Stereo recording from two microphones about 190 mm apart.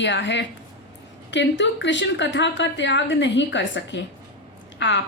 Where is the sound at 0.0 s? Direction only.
70° left (ahead or behind).